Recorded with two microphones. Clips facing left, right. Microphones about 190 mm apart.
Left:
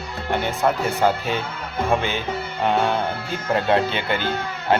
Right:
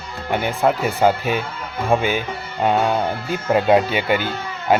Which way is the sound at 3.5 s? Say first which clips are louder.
Right 4 dB; 10° right (ahead or behind).